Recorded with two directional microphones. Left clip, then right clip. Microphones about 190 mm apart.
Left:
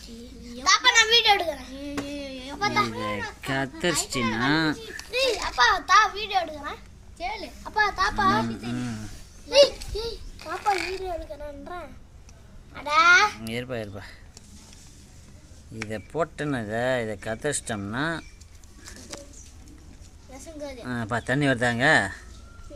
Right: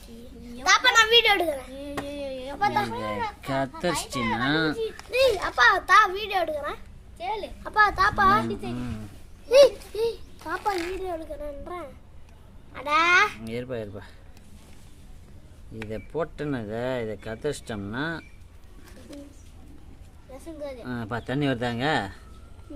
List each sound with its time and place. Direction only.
0.6 s a sound: 40° right (ahead or behind)
1.7 s a sound: 15° right (ahead or behind)
2.6 s a child's voice: 40° right (ahead or behind)
2.9 s a child's voice: 10° right (ahead or behind)
4.4 s a child's voice: 5° right (ahead or behind)
5.1 s a child's voice: 60° right (ahead or behind)
7.2 s a child's voice: 20° right (ahead or behind)
7.6 s a child's voice: 55° right (ahead or behind)
10.0 s a child's voice: 35° right (ahead or behind)
11.6 s a child's voice: 15° right (ahead or behind)
13.4 s speech: 5° right (ahead or behind)
15.9 s speech: 5° right (ahead or behind)
20.6 s speech: 5° right (ahead or behind)